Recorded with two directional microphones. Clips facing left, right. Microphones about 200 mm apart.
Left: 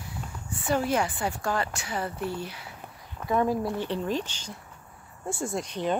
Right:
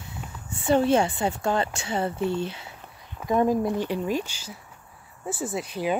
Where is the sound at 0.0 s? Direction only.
25° right (ahead or behind).